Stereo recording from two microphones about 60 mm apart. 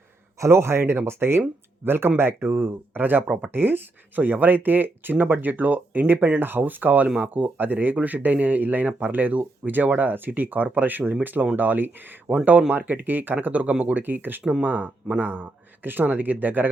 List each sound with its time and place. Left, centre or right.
0.3 s speech: right
3.2 s speech: centre
3.5 s speech: right